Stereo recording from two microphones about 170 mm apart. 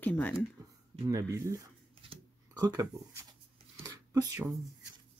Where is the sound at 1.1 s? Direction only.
20° right (ahead or behind).